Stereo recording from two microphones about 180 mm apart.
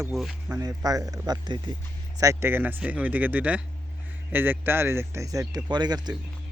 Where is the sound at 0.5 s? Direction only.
20° right (ahead or behind).